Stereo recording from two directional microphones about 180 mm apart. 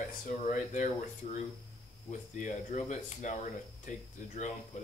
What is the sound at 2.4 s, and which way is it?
Speech, 40° left (ahead or behind).